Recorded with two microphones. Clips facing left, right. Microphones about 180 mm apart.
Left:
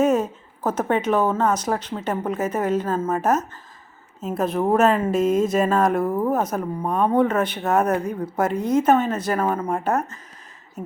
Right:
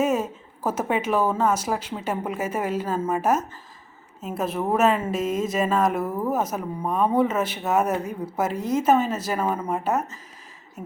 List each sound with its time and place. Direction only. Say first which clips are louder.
0.0 s a woman's voice: left 4 dB; 5° right (ahead or behind)
6.1 s speech: left 4 dB; 25° left (ahead or behind)
6.5 s a woman's voice: left 3 dB; centre (ahead or behind)